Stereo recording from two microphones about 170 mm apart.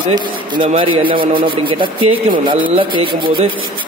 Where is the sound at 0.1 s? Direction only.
30° right (ahead or behind).